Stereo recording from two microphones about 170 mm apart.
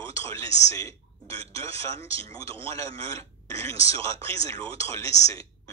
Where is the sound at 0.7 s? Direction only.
20° left (ahead or behind).